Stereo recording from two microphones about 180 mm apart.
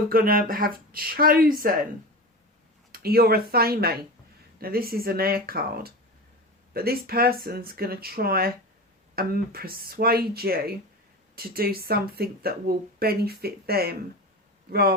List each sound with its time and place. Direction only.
0.1 s speech: 55° right (ahead or behind)
2.9 s speech: 60° right (ahead or behind)